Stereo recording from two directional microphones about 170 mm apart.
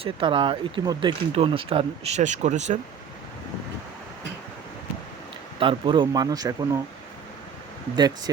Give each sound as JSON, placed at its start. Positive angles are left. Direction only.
{"t": 0.0, "sound": "speech", "side_deg": -30}
{"t": 5.5, "sound": "speech", "side_deg": -30}
{"t": 7.9, "sound": "speech", "side_deg": -25}